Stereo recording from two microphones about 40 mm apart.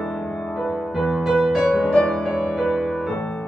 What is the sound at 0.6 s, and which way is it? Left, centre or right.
Music, centre.